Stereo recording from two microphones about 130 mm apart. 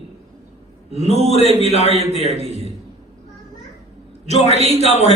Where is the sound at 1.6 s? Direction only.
55° left (ahead or behind).